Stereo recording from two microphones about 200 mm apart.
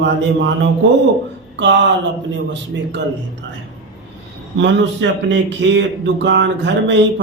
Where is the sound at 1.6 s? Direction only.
60° right (ahead or behind).